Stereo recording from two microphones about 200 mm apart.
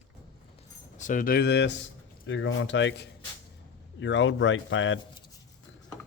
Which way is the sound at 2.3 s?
70° left (ahead or behind).